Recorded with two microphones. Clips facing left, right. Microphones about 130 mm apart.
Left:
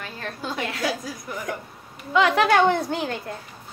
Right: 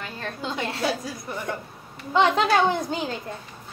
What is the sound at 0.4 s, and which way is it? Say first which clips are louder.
A child's voice: even; 20° right (ahead or behind).